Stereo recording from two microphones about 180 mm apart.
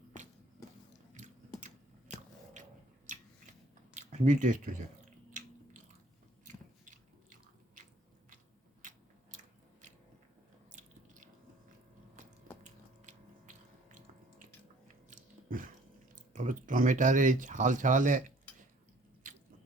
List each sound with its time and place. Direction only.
1.1 s biting: 40° right (ahead or behind)
3.9 s speech: 40° right (ahead or behind)
6.4 s biting: 45° right (ahead or behind)
12.6 s a sound: 40° right (ahead or behind)
15.1 s biting: 50° right (ahead or behind)
16.1 s speech: 45° right (ahead or behind)